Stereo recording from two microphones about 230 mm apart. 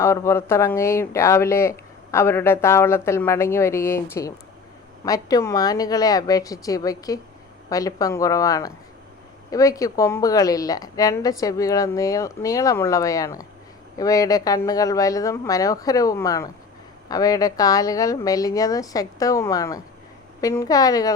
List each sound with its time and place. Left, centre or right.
0.0 s speech: centre